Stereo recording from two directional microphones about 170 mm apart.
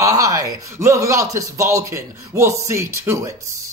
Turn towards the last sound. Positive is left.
turn(degrees=-20)  # may be behind; listen again after turning